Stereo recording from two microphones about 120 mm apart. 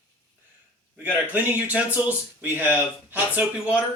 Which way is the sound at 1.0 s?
15° right (ahead or behind).